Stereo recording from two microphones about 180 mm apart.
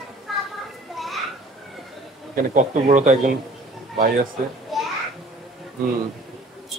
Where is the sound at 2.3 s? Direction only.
45° right (ahead or behind).